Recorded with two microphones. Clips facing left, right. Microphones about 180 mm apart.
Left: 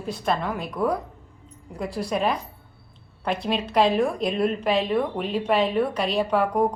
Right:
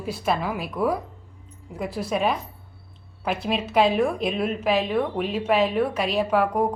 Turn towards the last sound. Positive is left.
turn(degrees=0)  # may be behind; listen again after turning